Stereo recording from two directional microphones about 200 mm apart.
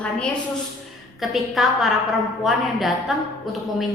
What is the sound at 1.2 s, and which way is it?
A woman's voice, centre (ahead or behind).